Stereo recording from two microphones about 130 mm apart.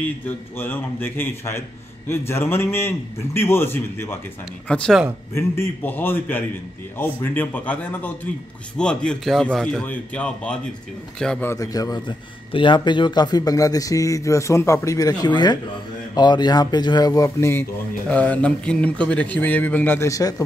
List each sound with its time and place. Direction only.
0.6 s a man's voice: 15° left (ahead or behind)
4.6 s a man's voice: 10° left (ahead or behind)
11.4 s a man's voice: 25° left (ahead or behind)